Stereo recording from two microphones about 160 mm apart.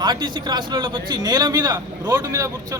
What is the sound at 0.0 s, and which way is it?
A man's voice, 30° right (ahead or behind).